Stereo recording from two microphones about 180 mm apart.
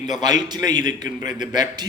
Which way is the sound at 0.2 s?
25° right (ahead or behind).